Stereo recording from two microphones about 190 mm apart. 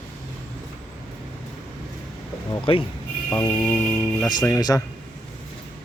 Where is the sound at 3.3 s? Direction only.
20° left (ahead or behind).